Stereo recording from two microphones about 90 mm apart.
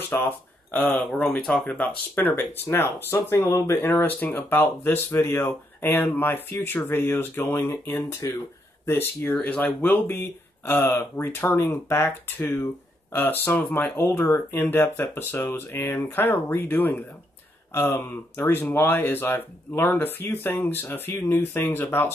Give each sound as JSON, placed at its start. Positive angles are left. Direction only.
{"t": 0.1, "sound": "speech", "side_deg": 25}
{"t": 0.7, "sound": "speech", "side_deg": 10}